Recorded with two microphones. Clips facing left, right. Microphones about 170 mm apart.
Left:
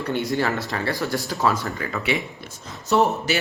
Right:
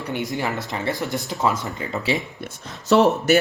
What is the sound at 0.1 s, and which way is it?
Speech, 15° right (ahead or behind).